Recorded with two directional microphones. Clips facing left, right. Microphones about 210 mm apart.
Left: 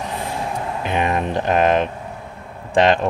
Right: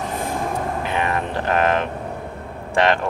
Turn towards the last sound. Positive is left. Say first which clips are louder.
# left 3 dB
turn(degrees=20)  # may be behind; listen again after turning